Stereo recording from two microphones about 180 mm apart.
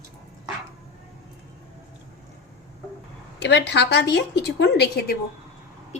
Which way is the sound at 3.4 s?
75° left (ahead or behind).